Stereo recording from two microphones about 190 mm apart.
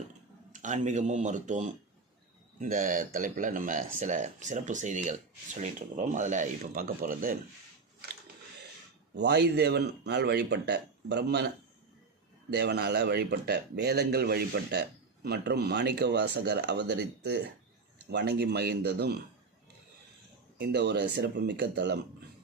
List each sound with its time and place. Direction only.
0.5 s speech: 40° right (ahead or behind)
9.1 s speech: 60° right (ahead or behind)
20.6 s speech: 60° right (ahead or behind)